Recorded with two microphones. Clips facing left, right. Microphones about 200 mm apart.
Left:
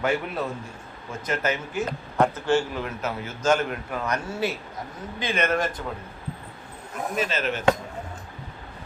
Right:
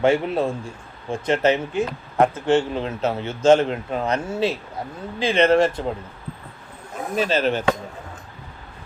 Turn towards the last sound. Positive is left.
turn(degrees=-35)  # may be behind; listen again after turning